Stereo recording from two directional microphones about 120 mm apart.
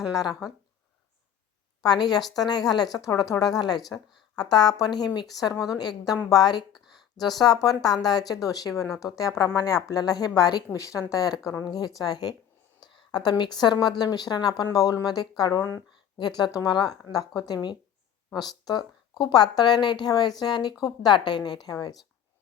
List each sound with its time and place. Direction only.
0.1 s speech: 30° left (ahead or behind)
1.8 s a woman's voice: 35° left (ahead or behind)
6.7 s a sound: centre (ahead or behind)
7.2 s a woman's voice: 35° left (ahead or behind)